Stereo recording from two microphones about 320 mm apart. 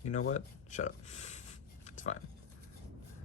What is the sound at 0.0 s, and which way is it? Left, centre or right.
Speech, left.